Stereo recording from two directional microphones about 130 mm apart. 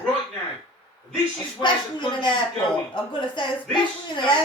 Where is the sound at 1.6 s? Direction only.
35° left (ahead or behind).